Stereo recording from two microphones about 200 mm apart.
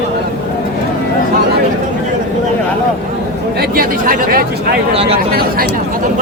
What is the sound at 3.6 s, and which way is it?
Speech, 45° right (ahead or behind).